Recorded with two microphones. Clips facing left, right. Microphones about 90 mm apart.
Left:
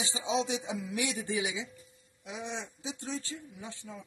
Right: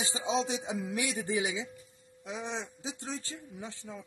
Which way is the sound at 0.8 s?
45° right (ahead or behind).